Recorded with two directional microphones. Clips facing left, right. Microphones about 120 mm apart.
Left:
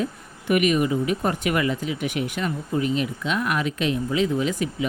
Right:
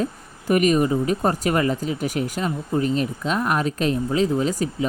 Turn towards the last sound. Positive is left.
turn(degrees=-35)  # may be behind; listen again after turning